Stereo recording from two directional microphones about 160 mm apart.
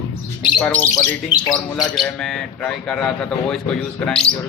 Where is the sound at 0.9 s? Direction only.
25° left (ahead or behind).